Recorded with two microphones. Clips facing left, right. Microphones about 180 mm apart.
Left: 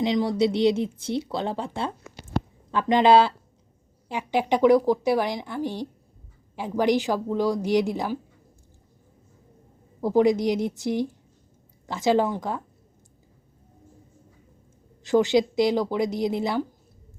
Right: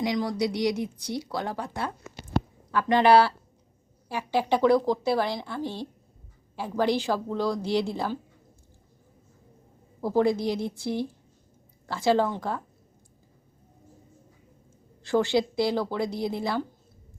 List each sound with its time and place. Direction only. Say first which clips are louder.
0.0 s speech: left 4 dB; 20° left (ahead or behind)
10.0 s speech: left 4 dB; 15° left (ahead or behind)
15.0 s speech: left 4 dB; 20° left (ahead or behind)